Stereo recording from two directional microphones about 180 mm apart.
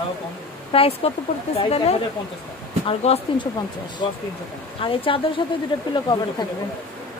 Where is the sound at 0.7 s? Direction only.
30° left (ahead or behind).